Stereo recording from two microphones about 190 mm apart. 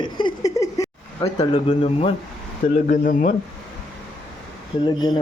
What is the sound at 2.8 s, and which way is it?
Speech, 45° left (ahead or behind).